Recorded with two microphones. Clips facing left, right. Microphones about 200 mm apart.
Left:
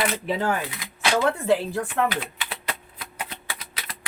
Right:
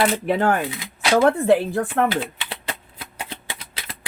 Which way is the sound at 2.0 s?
25° right (ahead or behind).